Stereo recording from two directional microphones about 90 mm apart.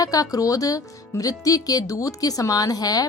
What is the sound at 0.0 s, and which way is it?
Speech, 40° left (ahead or behind).